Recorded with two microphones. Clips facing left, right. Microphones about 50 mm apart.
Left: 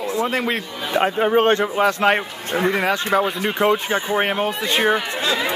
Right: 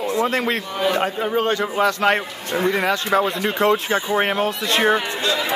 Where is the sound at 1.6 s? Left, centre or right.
Centre.